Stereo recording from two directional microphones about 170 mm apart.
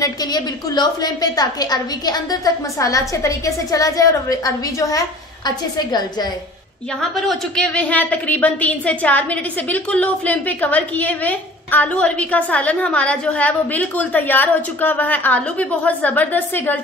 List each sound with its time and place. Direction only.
0.0 s a woman's voice: 25° left (ahead or behind)
7.0 s a woman's voice: 5° left (ahead or behind)